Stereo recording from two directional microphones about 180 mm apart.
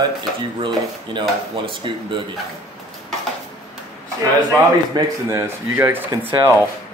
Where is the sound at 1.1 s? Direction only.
25° right (ahead or behind).